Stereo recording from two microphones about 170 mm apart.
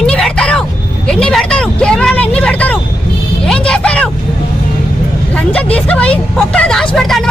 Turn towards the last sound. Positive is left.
turn(degrees=5)  # may be behind; listen again after turning